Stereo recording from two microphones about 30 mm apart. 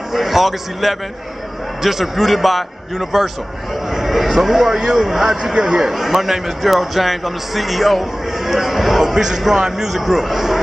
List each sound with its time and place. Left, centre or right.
0.1 s a man's voice: centre
5.4 s a man's voice: right
5.9 s a man's voice: centre
9.0 s a man's voice: centre
9.9 s a man's voice: centre